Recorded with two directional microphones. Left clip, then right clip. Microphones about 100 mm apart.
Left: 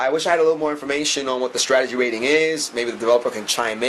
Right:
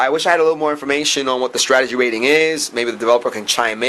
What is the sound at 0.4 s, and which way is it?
Speech, 25° right (ahead or behind).